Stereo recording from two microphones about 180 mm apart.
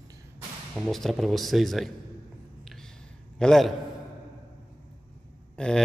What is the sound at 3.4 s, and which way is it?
Speech, centre (ahead or behind).